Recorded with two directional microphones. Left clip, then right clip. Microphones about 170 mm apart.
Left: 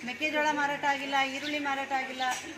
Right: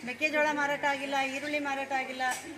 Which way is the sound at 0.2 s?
5° right (ahead or behind).